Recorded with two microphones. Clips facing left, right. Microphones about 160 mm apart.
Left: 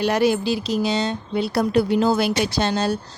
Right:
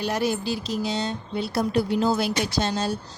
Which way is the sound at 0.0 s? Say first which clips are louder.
Left 6 dB; 75° left (ahead or behind).